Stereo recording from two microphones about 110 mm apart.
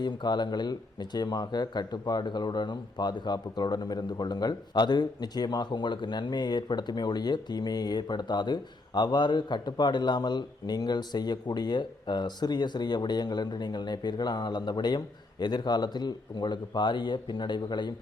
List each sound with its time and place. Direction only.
0.0 s speech: 40° left (ahead or behind)